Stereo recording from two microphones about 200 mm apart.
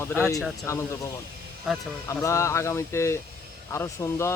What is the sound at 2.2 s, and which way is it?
Speech, 15° left (ahead or behind).